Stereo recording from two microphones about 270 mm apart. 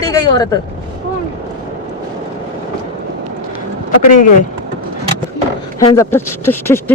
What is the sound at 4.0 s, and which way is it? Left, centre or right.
Speech, left.